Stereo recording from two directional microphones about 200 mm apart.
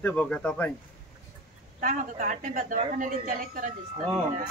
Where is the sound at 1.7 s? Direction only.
40° right (ahead or behind).